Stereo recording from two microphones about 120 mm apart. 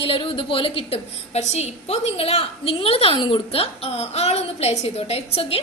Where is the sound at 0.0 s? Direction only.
50° left (ahead or behind).